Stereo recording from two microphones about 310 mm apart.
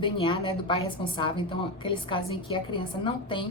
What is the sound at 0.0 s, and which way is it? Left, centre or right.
A woman's voice, centre.